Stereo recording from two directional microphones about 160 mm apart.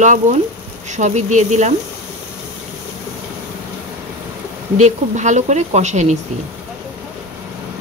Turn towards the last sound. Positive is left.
turn(degrees=-45)  # may be behind; listen again after turning